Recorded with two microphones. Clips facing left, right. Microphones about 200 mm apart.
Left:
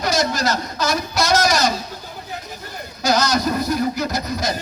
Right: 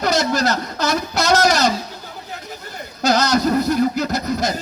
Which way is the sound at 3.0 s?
60° right (ahead or behind).